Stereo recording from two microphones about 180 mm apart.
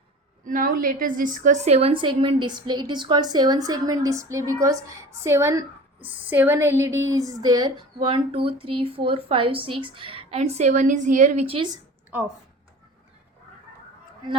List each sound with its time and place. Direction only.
0.4 s a woman's voice: 50° right (ahead or behind); by 11.8 s 30° right (ahead or behind)